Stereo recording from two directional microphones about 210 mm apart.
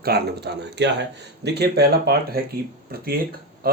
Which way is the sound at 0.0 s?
50° right (ahead or behind).